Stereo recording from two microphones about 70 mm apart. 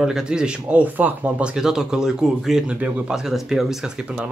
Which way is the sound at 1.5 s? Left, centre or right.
Centre.